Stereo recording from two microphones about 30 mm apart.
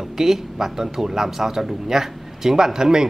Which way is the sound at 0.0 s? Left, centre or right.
Centre.